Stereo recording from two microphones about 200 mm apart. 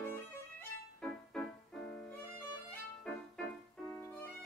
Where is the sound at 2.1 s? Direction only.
10° left (ahead or behind).